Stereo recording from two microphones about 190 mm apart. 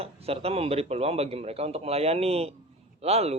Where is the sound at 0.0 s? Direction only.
30° right (ahead or behind).